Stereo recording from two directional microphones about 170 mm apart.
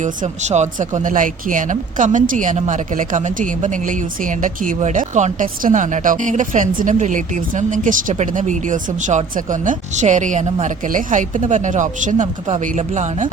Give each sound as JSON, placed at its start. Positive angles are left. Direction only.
{"t": 0.0, "sound": "speech", "side_deg": -45}